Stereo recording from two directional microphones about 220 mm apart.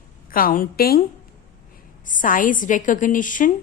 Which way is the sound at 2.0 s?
35° left (ahead or behind).